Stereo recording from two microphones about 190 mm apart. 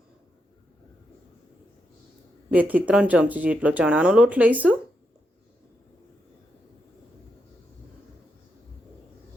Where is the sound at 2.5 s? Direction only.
10° right (ahead or behind).